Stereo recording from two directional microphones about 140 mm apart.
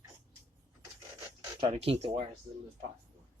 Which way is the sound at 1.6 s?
45° right (ahead or behind).